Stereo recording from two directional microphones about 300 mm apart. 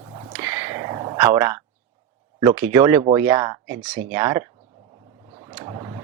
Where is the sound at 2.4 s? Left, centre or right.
Centre.